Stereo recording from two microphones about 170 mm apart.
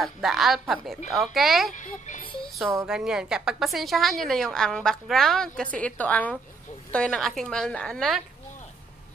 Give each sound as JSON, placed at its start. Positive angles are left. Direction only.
{"t": 0.0, "sound": "a woman's voice", "side_deg": 0}
{"t": 1.7, "sound": "a child's voice", "side_deg": 45}
{"t": 2.9, "sound": "a woman's voice", "side_deg": -5}